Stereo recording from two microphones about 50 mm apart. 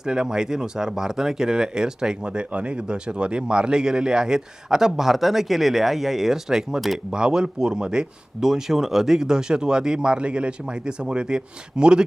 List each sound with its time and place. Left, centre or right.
0.0 s speech: centre